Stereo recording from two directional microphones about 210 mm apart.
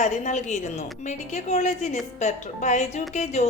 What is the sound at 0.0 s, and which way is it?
A woman's voice, 35° left (ahead or behind).